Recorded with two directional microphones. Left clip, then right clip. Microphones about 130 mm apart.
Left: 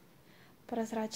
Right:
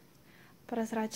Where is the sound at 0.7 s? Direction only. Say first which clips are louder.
Right 1 dB; 10° right (ahead or behind).